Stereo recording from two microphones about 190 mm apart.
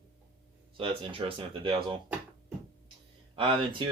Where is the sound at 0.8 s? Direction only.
30° right (ahead or behind).